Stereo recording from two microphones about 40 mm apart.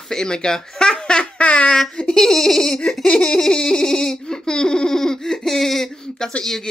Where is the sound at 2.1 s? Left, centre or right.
Centre.